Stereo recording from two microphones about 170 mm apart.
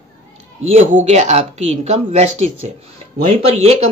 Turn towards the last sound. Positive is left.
turn(degrees=-35)  # may be behind; listen again after turning